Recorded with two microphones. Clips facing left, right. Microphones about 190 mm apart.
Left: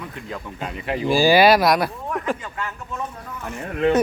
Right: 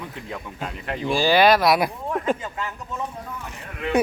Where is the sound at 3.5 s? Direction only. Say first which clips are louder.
Left 13 dB; 55° left (ahead or behind).